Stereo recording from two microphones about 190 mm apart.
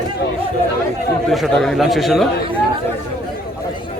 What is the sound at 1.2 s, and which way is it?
A man's voice, centre (ahead or behind).